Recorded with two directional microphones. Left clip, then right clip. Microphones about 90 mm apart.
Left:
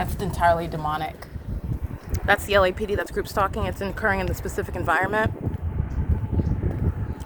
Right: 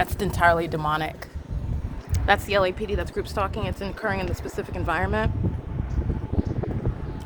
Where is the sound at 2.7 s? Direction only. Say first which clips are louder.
Left 2 dB; 50° left (ahead or behind).